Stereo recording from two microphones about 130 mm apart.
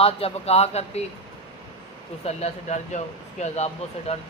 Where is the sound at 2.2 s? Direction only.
60° left (ahead or behind).